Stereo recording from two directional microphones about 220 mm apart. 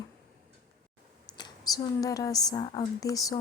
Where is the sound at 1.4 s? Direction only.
20° left (ahead or behind).